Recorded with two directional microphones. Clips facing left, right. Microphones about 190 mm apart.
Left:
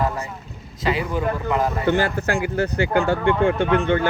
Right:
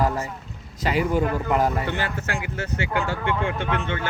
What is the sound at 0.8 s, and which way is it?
Speech, 45° right (ahead or behind).